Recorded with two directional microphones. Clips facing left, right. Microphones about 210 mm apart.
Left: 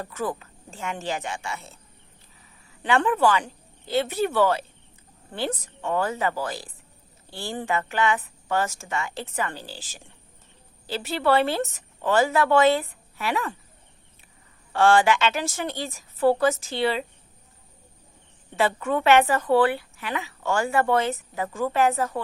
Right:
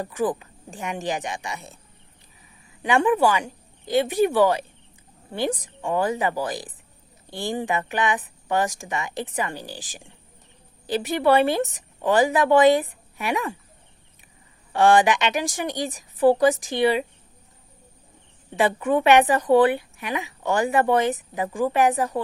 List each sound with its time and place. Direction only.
0.0 s a woman's voice: 15° right (ahead or behind)
2.8 s a woman's voice: 15° right (ahead or behind)
14.7 s a woman's voice: 15° right (ahead or behind)
18.5 s a woman's voice: 15° right (ahead or behind)